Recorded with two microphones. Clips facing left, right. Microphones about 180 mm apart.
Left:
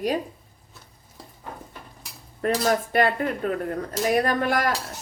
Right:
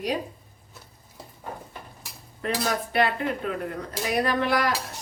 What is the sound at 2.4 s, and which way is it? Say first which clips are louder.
A woman's voice: left 5 dB; 45° left (ahead or behind).